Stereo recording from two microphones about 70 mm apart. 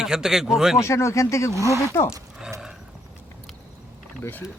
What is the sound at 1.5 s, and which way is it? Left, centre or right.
Speech, right.